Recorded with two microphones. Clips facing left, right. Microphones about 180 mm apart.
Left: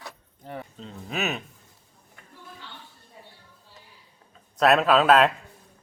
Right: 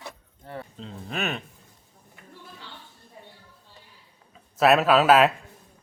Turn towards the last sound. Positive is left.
turn(degrees=-5)  # may be behind; listen again after turning